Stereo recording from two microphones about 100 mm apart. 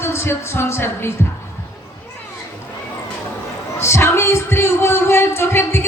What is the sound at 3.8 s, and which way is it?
Speech, 25° left (ahead or behind).